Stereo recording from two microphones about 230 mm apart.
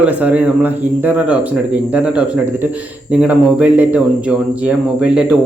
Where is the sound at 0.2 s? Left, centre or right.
Centre.